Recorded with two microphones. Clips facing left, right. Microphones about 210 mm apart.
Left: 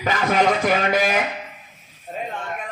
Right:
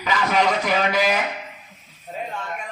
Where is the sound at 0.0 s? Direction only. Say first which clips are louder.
Left 2 dB; 50° left (ahead or behind).